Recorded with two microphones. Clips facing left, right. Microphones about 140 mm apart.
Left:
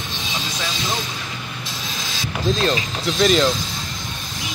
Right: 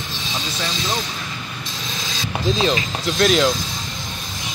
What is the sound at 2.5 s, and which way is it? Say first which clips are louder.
Speech: right 1 dB; centre (ahead or behind).